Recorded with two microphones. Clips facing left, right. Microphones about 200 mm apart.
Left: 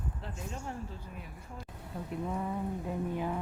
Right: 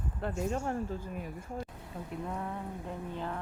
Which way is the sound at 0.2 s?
55° right (ahead or behind).